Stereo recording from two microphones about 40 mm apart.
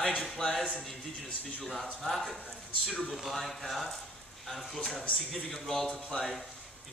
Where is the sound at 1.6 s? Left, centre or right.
Centre.